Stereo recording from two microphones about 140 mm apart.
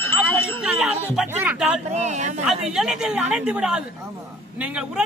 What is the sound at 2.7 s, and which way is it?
Speech, 5° right (ahead or behind).